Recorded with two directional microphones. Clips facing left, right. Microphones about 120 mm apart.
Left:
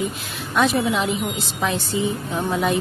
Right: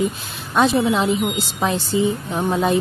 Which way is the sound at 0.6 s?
30° right (ahead or behind).